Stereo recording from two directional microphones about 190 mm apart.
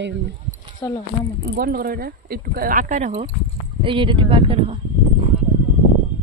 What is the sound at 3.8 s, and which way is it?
Speech, 25° right (ahead or behind).